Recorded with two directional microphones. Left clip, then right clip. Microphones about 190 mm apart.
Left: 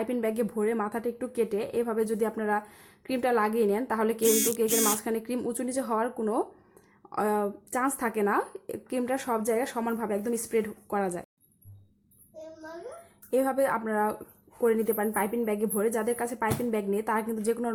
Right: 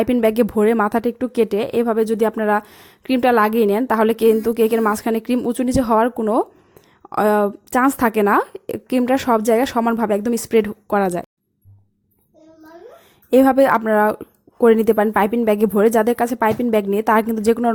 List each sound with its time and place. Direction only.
0.0 s a woman's voice: 45° right (ahead or behind)
13.3 s a woman's voice: 40° right (ahead or behind)